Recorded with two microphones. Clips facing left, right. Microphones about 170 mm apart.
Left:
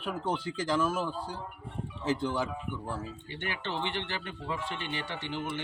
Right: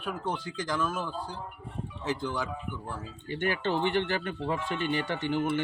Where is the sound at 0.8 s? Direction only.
5° left (ahead or behind).